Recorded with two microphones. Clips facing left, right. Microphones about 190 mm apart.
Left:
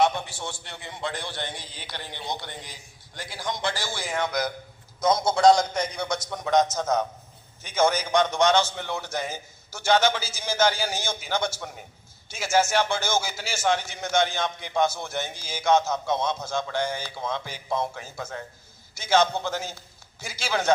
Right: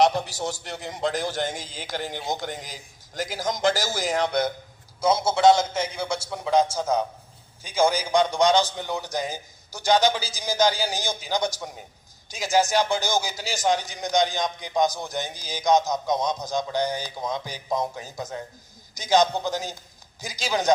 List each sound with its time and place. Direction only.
0.0 s a man's voice: 35° right (ahead or behind)
4.9 s a man's voice: 10° right (ahead or behind)